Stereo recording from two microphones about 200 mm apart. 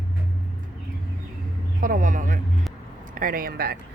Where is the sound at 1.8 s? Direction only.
40° right (ahead or behind).